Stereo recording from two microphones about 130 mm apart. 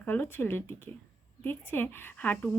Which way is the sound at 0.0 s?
15° left (ahead or behind).